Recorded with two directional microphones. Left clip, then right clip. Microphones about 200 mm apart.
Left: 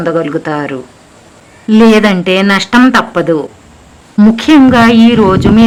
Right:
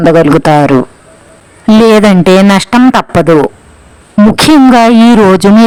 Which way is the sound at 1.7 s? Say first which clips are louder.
Right 3 dB; 40° right (ahead or behind).